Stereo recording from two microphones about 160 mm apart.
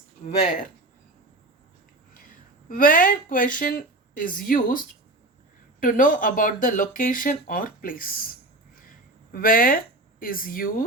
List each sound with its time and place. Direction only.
2.6 s speech: 60° left (ahead or behind)